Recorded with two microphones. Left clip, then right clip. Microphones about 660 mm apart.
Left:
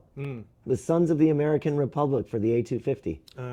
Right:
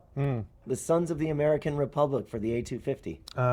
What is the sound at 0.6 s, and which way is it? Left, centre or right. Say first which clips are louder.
Speech: left 3 dB; left.